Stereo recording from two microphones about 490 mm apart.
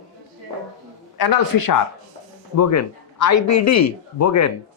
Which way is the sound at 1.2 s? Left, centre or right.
Left.